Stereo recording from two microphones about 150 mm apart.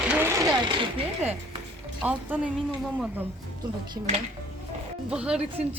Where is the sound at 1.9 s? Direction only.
10° right (ahead or behind).